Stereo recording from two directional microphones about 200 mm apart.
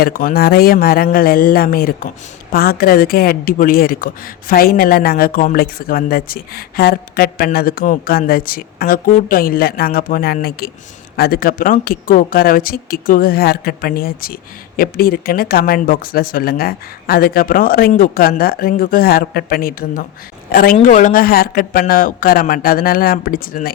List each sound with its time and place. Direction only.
0.0 s a woman's voice: 45° left (ahead or behind)